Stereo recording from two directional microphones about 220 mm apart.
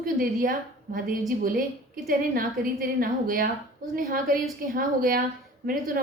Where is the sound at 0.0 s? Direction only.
40° right (ahead or behind).